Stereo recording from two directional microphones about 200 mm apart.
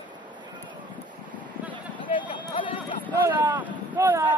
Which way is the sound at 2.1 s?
25° left (ahead or behind).